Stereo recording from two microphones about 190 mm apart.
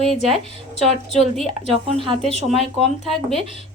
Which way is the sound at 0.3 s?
30° right (ahead or behind).